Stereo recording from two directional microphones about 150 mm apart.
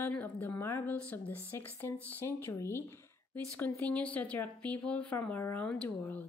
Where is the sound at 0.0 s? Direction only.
10° left (ahead or behind).